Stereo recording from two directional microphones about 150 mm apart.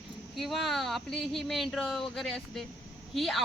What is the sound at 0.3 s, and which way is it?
A woman's voice, centre (ahead or behind).